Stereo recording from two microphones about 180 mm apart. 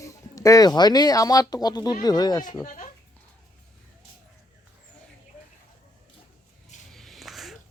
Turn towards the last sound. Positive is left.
turn(degrees=0)  # may be behind; listen again after turning